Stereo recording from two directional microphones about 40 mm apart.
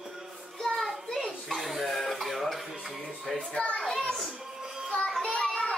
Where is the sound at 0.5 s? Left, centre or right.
Centre.